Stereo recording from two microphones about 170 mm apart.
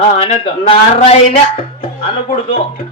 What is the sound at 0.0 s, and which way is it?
Speech, 35° left (ahead or behind).